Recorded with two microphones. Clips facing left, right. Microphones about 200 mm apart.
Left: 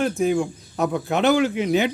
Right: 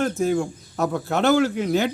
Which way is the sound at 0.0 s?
15° left (ahead or behind).